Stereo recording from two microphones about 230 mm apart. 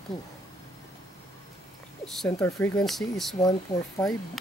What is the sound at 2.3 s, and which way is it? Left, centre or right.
Speech, centre.